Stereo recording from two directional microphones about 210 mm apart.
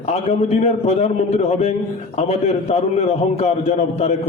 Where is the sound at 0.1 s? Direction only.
30° left (ahead or behind).